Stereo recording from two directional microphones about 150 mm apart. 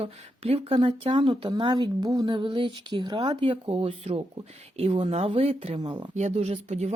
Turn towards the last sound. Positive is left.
turn(degrees=-50)  # may be behind; listen again after turning